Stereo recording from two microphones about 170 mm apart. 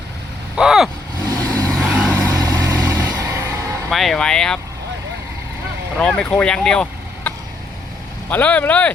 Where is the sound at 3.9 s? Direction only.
Centre (ahead or behind).